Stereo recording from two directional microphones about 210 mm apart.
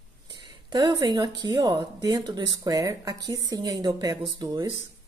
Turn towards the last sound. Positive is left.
turn(degrees=-20)  # may be behind; listen again after turning